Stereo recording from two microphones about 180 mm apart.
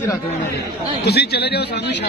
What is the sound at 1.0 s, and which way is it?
Speech, 65° left (ahead or behind).